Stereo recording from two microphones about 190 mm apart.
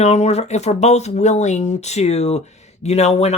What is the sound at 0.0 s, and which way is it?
Speech, 35° left (ahead or behind).